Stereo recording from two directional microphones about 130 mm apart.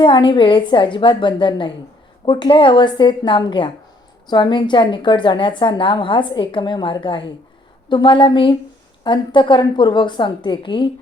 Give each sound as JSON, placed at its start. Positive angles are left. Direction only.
{"t": 0.0, "sound": "a woman's voice", "side_deg": 40}